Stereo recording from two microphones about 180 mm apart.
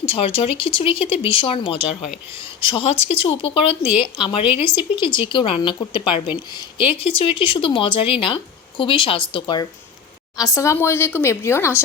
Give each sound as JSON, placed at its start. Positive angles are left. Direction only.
{"t": 0.0, "sound": "speech", "side_deg": 30}